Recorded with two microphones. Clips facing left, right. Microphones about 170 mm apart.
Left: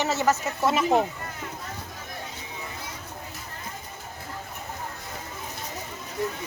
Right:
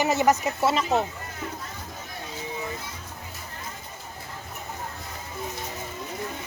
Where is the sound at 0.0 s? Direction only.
15° right (ahead or behind).